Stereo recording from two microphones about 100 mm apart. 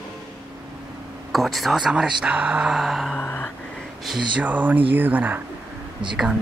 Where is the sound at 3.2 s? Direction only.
20° left (ahead or behind).